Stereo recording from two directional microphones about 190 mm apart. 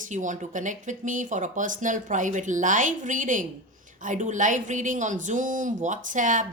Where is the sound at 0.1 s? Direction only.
40° right (ahead or behind).